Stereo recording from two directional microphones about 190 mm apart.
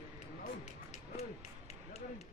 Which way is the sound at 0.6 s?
35° left (ahead or behind).